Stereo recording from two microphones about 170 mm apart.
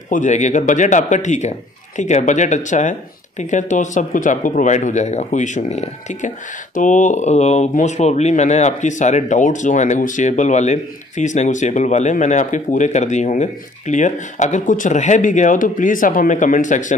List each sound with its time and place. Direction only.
0.1 s speech: 45° left (ahead or behind)